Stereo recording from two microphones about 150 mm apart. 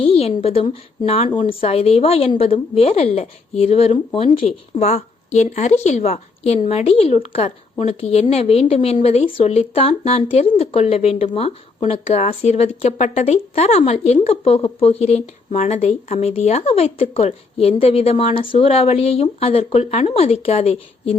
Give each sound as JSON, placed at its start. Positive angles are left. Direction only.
{"t": 0.0, "sound": "a woman's voice", "side_deg": 40}